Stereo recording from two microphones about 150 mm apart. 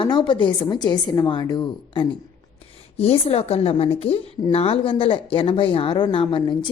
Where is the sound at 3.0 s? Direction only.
40° left (ahead or behind).